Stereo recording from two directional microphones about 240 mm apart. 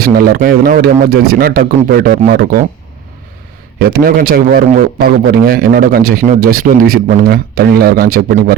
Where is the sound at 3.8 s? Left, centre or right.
Right.